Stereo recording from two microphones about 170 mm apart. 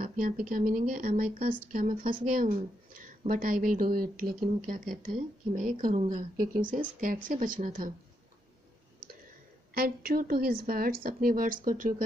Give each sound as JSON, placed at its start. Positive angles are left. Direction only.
{"t": 0.0, "sound": "a woman's voice", "side_deg": -55}
{"t": 9.8, "sound": "a woman's voice", "side_deg": -60}